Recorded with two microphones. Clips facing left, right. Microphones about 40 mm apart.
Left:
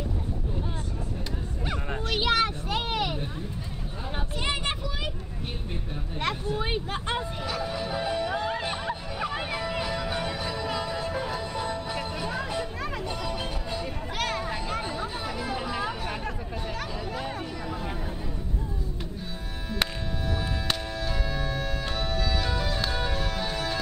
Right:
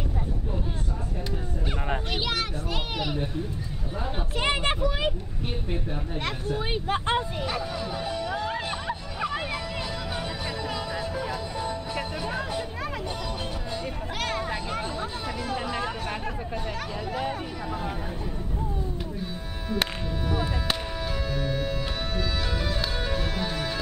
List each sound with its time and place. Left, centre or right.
2.1 s vehicle: centre
6.1 s speech: centre
6.9 s speech: centre
7.6 s music: centre
10.4 s music: centre
13.3 s music: centre
17.1 s a sound: centre
19.7 s music: centre